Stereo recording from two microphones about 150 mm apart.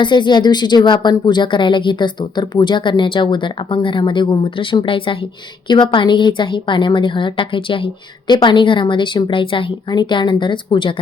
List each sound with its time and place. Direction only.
0.0 s a woman's voice: 30° left (ahead or behind)